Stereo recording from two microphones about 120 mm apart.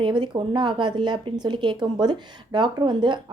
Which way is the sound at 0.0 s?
40° right (ahead or behind).